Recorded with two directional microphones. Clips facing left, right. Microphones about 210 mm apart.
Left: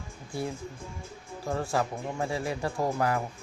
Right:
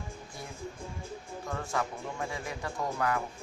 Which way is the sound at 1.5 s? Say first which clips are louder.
Left 5 dB; 30° left (ahead or behind).